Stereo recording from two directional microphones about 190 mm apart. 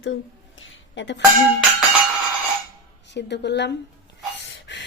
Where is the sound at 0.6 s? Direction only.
80° left.